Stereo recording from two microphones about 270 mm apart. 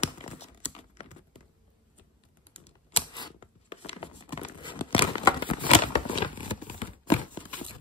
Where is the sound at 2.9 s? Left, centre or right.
Left.